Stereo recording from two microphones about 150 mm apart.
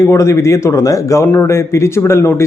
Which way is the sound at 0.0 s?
20° left (ahead or behind).